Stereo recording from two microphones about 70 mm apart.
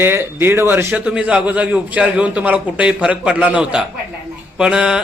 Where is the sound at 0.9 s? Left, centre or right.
Centre.